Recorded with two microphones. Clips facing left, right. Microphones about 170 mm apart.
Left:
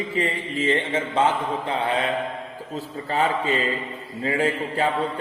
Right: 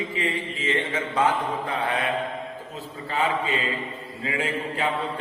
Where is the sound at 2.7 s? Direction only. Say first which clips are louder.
Left 4 dB; 35° left (ahead or behind).